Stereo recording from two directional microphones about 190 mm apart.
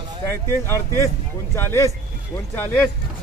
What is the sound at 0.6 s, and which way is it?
A man's voice, 15° left (ahead or behind).